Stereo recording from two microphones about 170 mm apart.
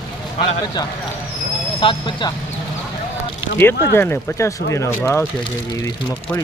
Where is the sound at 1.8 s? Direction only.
30° left (ahead or behind).